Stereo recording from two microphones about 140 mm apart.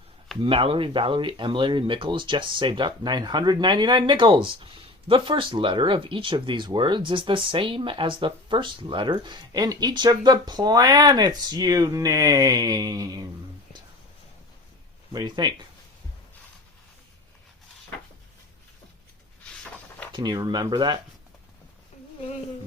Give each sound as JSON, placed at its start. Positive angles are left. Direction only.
{"t": 0.4, "sound": "speech", "side_deg": -40}
{"t": 15.1, "sound": "speech", "side_deg": -30}
{"t": 20.1, "sound": "speech", "side_deg": -30}